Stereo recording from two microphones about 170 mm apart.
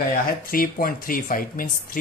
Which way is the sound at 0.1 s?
55° left (ahead or behind).